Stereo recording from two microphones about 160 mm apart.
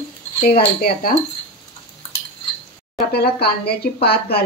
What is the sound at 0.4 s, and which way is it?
Speech, 70° left (ahead or behind).